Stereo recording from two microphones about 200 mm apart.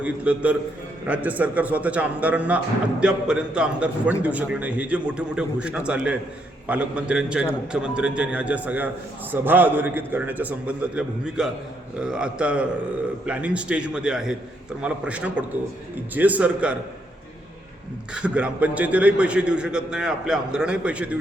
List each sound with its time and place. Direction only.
0.0 s a man's voice: 5° right (ahead or behind)
18.1 s a man's voice: 5° right (ahead or behind)